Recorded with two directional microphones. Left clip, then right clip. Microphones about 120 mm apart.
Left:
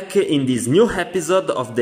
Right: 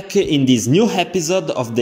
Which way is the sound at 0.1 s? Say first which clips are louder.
Right 3 dB; 25° right (ahead or behind).